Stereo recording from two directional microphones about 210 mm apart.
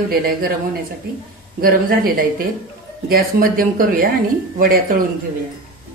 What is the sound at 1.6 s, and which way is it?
Speech, 45° right (ahead or behind).